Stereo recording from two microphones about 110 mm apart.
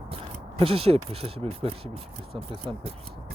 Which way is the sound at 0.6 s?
60° right (ahead or behind).